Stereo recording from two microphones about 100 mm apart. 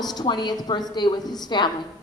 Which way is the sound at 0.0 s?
45° left (ahead or behind).